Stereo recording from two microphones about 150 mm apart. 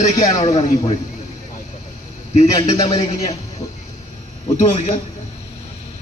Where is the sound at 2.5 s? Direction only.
25° left (ahead or behind).